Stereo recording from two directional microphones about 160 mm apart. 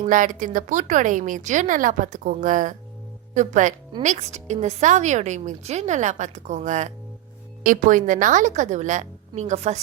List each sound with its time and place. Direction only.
0.0 s a woman's voice: 55° right (ahead or behind)